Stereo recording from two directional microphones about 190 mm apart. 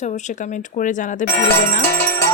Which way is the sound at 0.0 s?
40° left (ahead or behind).